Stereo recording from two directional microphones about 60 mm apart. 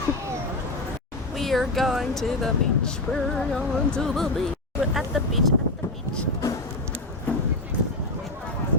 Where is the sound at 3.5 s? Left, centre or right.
Centre.